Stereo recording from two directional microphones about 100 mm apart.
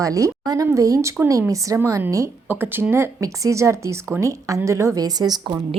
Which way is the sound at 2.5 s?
20° right (ahead or behind).